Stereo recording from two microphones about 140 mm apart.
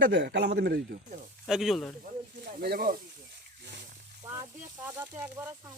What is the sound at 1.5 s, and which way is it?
Speech, centre (ahead or behind).